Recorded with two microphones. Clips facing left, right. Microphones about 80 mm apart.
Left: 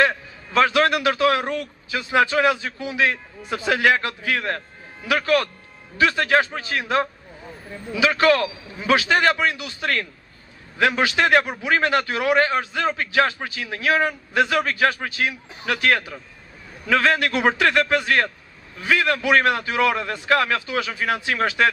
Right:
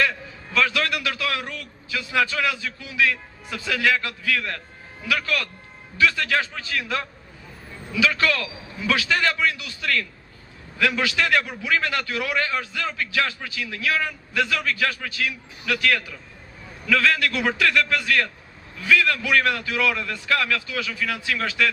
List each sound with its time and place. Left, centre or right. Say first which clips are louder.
0.0 s a man's voice: left 4 dB; left